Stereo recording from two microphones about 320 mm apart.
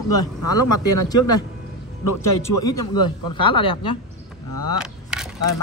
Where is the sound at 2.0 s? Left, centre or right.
Left.